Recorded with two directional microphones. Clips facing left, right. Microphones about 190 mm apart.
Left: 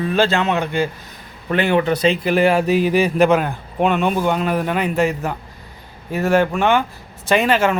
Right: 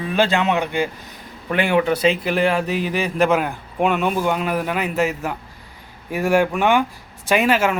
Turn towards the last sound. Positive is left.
turn(degrees=-5)  # may be behind; listen again after turning